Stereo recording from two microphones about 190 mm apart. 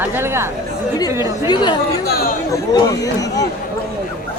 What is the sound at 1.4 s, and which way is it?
Speech, 25° left (ahead or behind).